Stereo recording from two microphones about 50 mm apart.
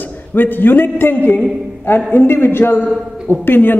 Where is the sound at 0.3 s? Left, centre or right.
Left.